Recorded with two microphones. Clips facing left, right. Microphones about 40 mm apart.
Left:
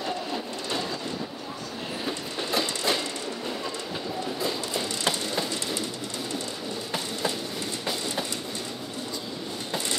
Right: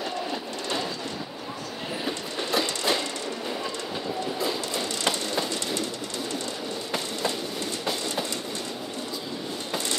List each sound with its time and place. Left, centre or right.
0.0 s train: centre
2.0 s train: centre
4.4 s train: centre